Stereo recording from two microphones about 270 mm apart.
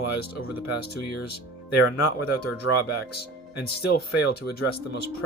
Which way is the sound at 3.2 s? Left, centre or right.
Left.